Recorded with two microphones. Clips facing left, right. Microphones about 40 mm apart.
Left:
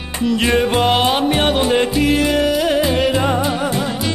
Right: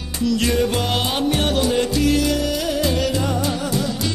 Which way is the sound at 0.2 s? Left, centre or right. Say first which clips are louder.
Left 3 dB; left.